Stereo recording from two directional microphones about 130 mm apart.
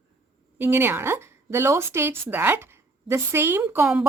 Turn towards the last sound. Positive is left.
turn(degrees=-15)  # may be behind; listen again after turning